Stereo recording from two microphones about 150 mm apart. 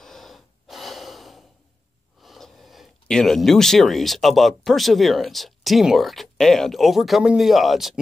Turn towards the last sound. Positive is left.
turn(degrees=0)  # may be behind; listen again after turning